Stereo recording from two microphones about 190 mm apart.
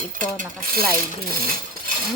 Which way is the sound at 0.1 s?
45° right (ahead or behind).